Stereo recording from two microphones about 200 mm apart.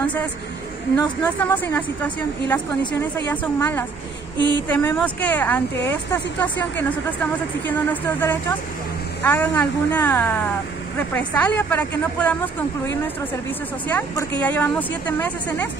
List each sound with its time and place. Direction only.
1.4 s speech: 10° left (ahead or behind)
4.4 s speech: 20° right (ahead or behind)
4.6 s speech: 10° left (ahead or behind)
13.8 s speech: 10° left (ahead or behind)